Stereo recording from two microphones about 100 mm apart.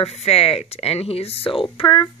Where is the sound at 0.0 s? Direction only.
90° left.